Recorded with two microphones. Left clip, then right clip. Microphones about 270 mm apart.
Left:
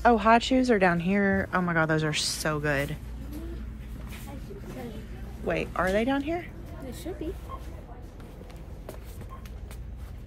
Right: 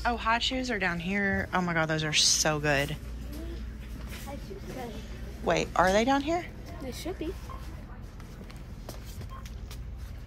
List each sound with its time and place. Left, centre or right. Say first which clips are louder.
0.0 s speech: left 7 dB; centre
5.4 s speech: right 3 dB; centre
7.1 s speech: even; right